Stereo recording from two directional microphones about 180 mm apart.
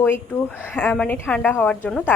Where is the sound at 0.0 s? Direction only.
15° left (ahead or behind).